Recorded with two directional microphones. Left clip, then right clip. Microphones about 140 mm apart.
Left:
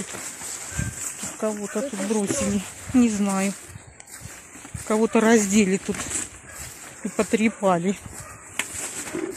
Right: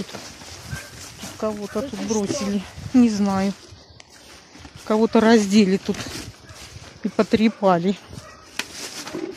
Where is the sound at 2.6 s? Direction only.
20° right (ahead or behind).